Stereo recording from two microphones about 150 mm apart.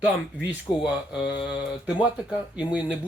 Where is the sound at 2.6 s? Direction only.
5° right (ahead or behind).